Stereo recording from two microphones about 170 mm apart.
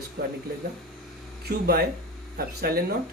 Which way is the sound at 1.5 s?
65° right (ahead or behind).